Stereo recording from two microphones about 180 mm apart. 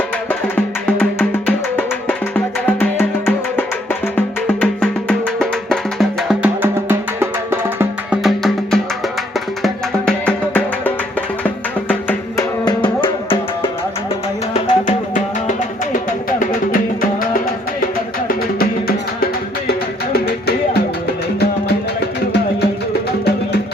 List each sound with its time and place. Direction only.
0.3 s music: 10° left (ahead or behind)
4.4 s music: 5° left (ahead or behind); by 8.2 s 15° right (ahead or behind)
8.2 s music: centre (ahead or behind)
12.6 s music: 25° left (ahead or behind)
14.5 s music: 45° left (ahead or behind)